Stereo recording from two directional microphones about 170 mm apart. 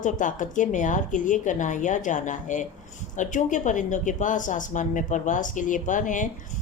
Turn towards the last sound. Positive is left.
turn(degrees=50)  # may be behind; listen again after turning